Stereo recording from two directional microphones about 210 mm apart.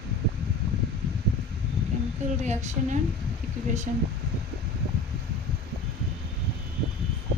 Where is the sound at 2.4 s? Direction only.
35° right (ahead or behind).